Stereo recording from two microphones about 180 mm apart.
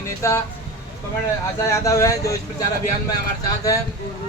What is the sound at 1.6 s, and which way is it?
Speech, 15° left (ahead or behind).